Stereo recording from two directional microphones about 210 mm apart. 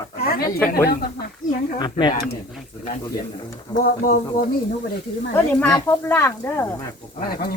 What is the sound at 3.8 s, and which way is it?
Speech, 40° left (ahead or behind).